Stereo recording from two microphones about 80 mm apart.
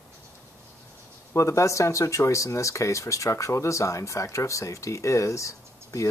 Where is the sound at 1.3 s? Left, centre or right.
Left.